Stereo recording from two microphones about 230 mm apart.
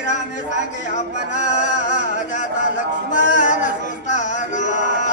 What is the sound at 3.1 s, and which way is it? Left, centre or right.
Chant, left.